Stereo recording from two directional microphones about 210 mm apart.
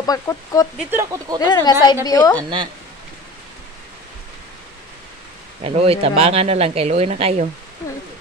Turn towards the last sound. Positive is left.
turn(degrees=-30)  # may be behind; listen again after turning